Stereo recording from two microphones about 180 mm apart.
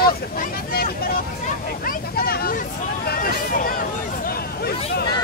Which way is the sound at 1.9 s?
55° left (ahead or behind).